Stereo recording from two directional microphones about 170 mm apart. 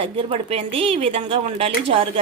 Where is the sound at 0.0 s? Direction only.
35° right (ahead or behind).